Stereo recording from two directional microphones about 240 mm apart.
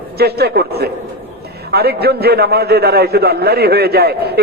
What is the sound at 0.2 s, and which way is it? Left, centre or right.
A man's voice, right.